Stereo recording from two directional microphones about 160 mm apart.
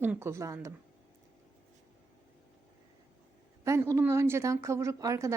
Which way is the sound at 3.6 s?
20° right (ahead or behind).